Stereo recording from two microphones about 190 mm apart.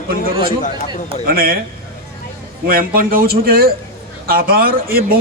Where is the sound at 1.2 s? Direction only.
50° right (ahead or behind).